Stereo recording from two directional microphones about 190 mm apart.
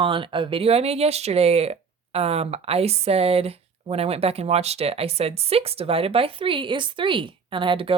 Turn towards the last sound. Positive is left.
turn(degrees=-25)  # may be behind; listen again after turning